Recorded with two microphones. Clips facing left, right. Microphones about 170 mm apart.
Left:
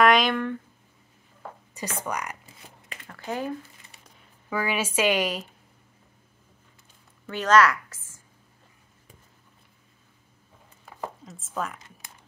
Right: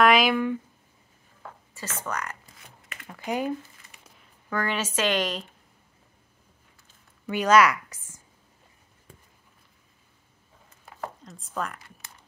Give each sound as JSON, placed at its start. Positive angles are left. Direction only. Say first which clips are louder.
{"t": 0.0, "sound": "speech", "louder": "even", "side_deg": -5}
{"t": 1.7, "sound": "speech", "louder": "left 2 dB", "side_deg": 15}
{"t": 3.1, "sound": "speech", "louder": "right 3 dB", "side_deg": -15}
{"t": 4.5, "sound": "speech", "louder": "left 1 dB", "side_deg": 10}
{"t": 7.2, "sound": "a woman's voice", "louder": "right 1 dB", "side_deg": -10}
{"t": 11.2, "sound": "speech", "louder": "even", "side_deg": 0}